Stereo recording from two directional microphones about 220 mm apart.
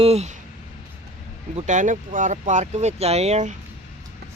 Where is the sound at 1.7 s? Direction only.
35° right (ahead or behind).